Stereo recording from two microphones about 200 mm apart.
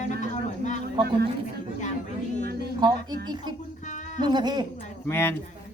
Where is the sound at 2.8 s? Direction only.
20° right (ahead or behind).